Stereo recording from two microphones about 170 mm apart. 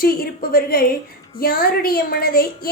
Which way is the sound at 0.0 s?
60° left (ahead or behind).